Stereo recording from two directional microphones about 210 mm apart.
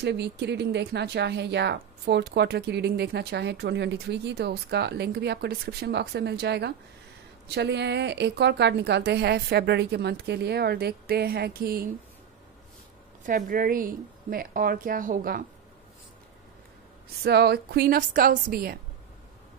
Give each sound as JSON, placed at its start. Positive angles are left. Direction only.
{"t": 0.0, "sound": "speech", "side_deg": -55}
{"t": 13.2, "sound": "speech", "side_deg": -40}
{"t": 17.2, "sound": "speech", "side_deg": -50}